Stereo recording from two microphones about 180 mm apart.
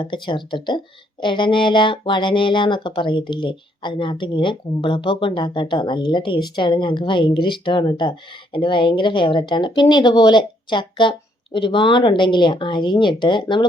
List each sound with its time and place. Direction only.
0.0 s speech: 25° left (ahead or behind)